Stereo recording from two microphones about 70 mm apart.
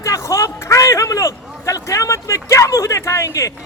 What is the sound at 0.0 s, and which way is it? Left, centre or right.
A man's voice, left.